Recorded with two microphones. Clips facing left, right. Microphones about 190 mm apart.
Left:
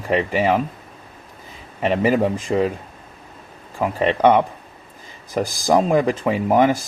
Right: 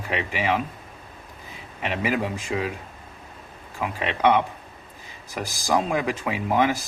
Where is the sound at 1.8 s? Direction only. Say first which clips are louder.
Left 8 dB; 35° left (ahead or behind).